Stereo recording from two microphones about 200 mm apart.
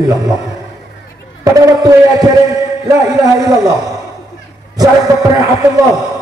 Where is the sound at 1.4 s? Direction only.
15° right (ahead or behind).